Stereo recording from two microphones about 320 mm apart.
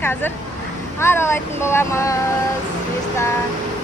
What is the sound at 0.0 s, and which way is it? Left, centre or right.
Speech, centre.